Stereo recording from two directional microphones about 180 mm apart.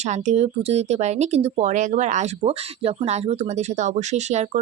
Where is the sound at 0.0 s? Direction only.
40° right (ahead or behind).